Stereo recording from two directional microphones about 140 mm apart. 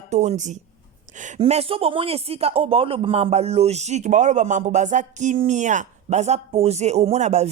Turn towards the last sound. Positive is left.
turn(degrees=-50)  # may be behind; listen again after turning